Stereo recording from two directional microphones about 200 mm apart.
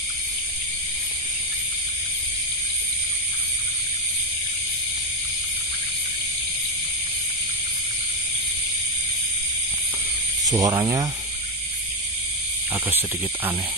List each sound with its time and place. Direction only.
10.4 s speech: 20° right (ahead or behind)